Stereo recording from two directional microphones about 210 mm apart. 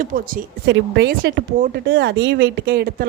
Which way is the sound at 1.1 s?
45° right (ahead or behind).